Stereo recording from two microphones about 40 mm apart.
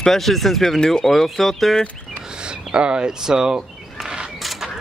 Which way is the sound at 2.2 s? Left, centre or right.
Right.